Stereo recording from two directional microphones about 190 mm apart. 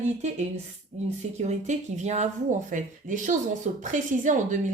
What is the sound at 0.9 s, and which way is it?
Speech, 35° right (ahead or behind).